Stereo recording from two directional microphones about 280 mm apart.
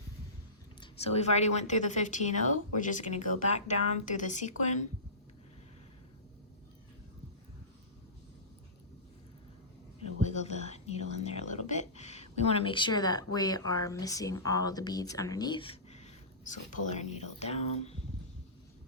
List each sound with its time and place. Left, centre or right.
0.8 s a woman's voice: left
10.2 s whispering: left
17.7 s a woman's voice: left